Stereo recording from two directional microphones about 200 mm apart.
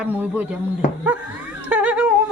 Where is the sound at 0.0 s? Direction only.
10° right (ahead or behind).